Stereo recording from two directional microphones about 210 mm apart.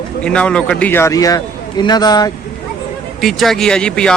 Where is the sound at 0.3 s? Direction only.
5° left (ahead or behind).